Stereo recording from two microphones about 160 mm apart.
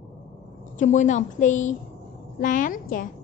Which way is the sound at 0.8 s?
50° left (ahead or behind).